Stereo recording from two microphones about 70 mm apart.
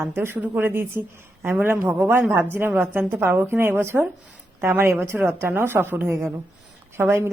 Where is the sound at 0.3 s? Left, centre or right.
Right.